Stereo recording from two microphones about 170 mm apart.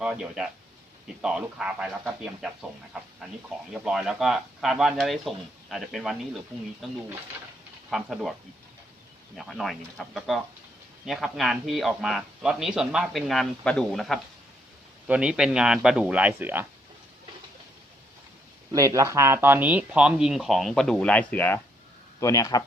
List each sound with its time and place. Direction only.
0.0 s a man's voice: 5° right (ahead or behind)
9.4 s a man's voice: centre (ahead or behind)
18.7 s a man's voice: 20° right (ahead or behind); by 22.6 s 20° left (ahead or behind)